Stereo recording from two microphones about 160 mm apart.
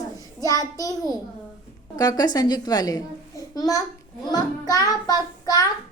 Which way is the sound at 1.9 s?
25° left (ahead or behind).